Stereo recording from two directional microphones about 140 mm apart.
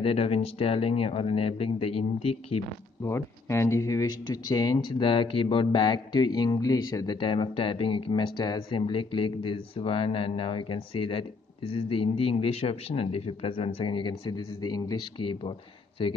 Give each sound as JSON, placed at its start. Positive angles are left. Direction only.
{"t": 0.0, "sound": "speech", "side_deg": 45}
{"t": 3.0, "sound": "speech", "side_deg": 20}